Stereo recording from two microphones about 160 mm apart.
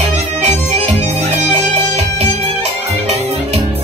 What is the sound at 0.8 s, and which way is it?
Music, 40° right (ahead or behind).